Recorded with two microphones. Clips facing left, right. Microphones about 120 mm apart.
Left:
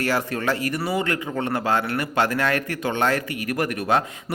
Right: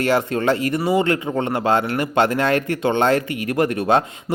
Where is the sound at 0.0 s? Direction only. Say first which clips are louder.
Right 5 dB; 25° right (ahead or behind).